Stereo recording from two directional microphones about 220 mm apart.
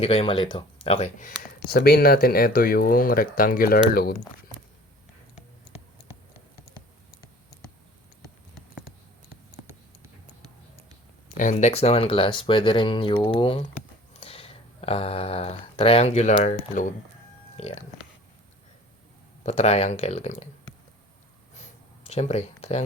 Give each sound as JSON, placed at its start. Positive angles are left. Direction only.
{"t": 0.0, "sound": "speech", "side_deg": 25}
{"t": 1.5, "sound": "speech", "side_deg": 45}
{"t": 11.3, "sound": "speech", "side_deg": 35}
{"t": 19.4, "sound": "speech", "side_deg": 30}
{"t": 21.5, "sound": "a sound", "side_deg": 30}